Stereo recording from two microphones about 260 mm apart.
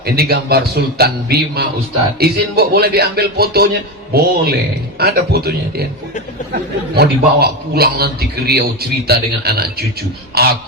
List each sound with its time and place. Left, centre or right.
0.0 s a man's voice: right